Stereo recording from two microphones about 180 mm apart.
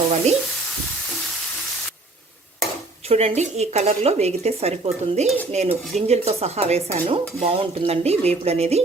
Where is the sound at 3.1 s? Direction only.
35° right (ahead or behind).